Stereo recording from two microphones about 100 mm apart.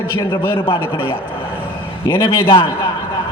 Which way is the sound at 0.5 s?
60° left (ahead or behind).